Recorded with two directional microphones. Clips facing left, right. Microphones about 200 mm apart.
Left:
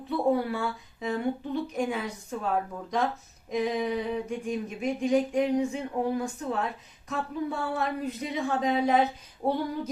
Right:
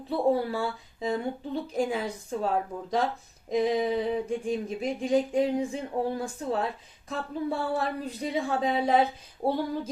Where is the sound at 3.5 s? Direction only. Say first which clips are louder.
Right 3 dB; 35° right (ahead or behind).